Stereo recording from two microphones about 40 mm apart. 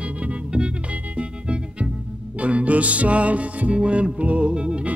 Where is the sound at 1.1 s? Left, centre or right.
Right.